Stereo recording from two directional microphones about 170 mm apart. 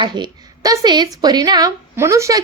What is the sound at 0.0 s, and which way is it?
A woman's voice, 25° right (ahead or behind).